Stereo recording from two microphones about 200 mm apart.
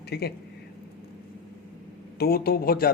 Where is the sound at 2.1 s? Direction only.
50° left (ahead or behind).